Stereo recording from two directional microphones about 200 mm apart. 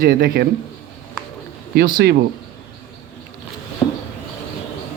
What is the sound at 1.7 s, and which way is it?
Speech, 45° right (ahead or behind).